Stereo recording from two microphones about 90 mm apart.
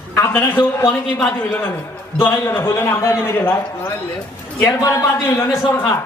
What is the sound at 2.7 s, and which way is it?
Speech, 30° left (ahead or behind).